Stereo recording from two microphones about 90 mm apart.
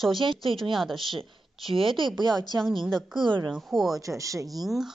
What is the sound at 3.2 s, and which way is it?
Speech, 60° right (ahead or behind).